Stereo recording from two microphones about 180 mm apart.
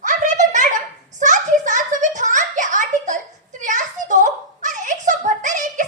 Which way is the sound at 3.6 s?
45° right (ahead or behind).